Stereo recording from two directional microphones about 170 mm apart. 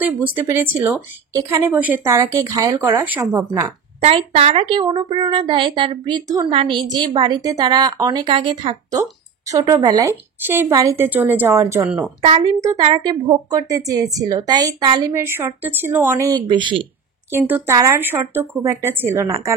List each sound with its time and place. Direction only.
0.0 s a woman's voice: 10° right (ahead or behind)
2.1 s a woman's voice: 20° right (ahead or behind)
4.0 s a woman's voice: 40° right (ahead or behind); by 11.9 s 15° right (ahead or behind)
12.2 s a woman's voice: 35° right (ahead or behind)
17.3 s a woman's voice: 15° right (ahead or behind)